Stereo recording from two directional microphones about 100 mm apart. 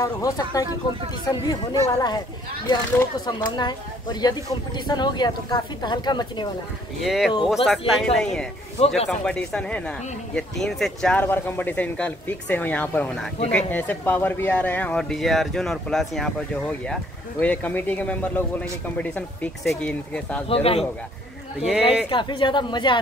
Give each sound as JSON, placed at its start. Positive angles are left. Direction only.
{"t": 0.0, "sound": "speech", "side_deg": 35}
{"t": 7.0, "sound": "speech", "side_deg": 0}
{"t": 8.7, "sound": "a man's voice", "side_deg": 90}
{"t": 9.2, "sound": "speech", "side_deg": 10}
{"t": 11.2, "sound": "speech", "side_deg": 20}
{"t": 20.4, "sound": "speech", "side_deg": 75}
{"t": 21.5, "sound": "speech", "side_deg": -5}
{"t": 22.1, "sound": "speech", "side_deg": 50}